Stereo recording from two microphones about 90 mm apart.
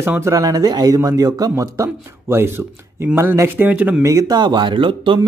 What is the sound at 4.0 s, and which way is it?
Speech, 35° right (ahead or behind).